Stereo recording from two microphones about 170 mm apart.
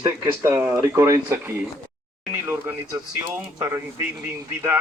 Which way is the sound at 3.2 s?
15° right (ahead or behind).